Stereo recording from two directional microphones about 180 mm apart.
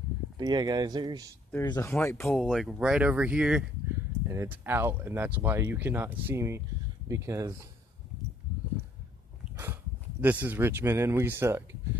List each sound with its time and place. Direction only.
0.4 s speech: 20° right (ahead or behind)
1.5 s speech: 20° left (ahead or behind)
2.2 s speech: centre (ahead or behind); by 7.6 s 15° right (ahead or behind)
9.4 s dog: 15° right (ahead or behind)
10.2 s speech: 10° right (ahead or behind)